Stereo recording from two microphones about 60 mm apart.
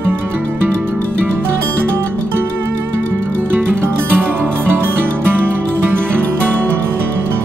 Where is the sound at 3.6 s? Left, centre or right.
Right.